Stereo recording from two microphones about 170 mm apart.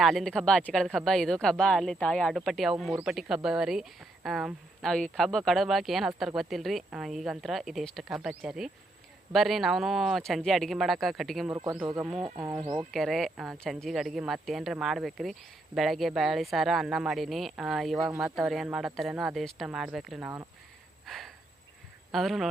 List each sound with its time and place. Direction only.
0.0 s speech: centre (ahead or behind)
11.5 s speech: 20° right (ahead or behind)
12.9 s speech: centre (ahead or behind)
21.1 s a sound: centre (ahead or behind)
22.1 s speech: centre (ahead or behind)